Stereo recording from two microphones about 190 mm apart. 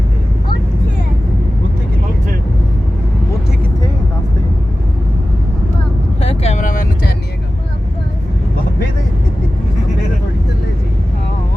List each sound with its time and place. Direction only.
6.2 s vehicle: 35° left (ahead or behind)